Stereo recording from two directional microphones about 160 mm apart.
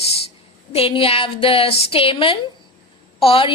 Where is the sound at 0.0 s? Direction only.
40° left (ahead or behind).